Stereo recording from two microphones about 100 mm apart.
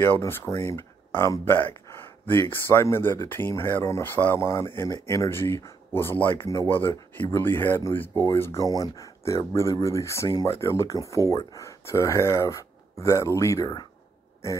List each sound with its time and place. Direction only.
0.0 s speech: 25° left (ahead or behind)